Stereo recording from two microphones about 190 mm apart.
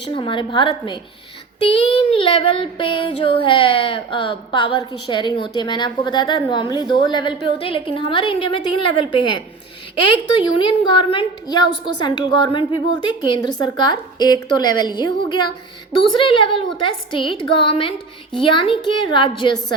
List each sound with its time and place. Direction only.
0.0 s a woman's voice: 25° left (ahead or behind)
10.6 s a woman's voice: 25° left (ahead or behind)